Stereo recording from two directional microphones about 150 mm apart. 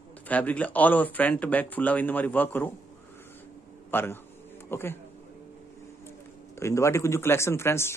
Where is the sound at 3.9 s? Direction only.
15° left (ahead or behind).